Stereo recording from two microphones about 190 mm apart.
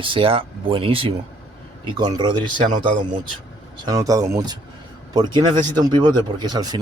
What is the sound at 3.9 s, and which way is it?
Speech, 20° right (ahead or behind).